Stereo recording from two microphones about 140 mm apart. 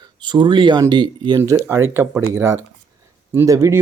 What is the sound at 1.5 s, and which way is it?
Speech, 20° right (ahead or behind).